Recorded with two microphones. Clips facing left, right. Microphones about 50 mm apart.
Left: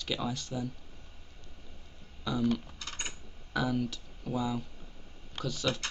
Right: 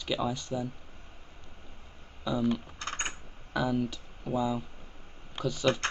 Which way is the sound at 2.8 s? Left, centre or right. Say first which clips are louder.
Right 6 dB; right.